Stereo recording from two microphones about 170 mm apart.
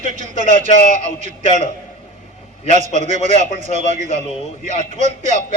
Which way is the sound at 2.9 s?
45° right (ahead or behind).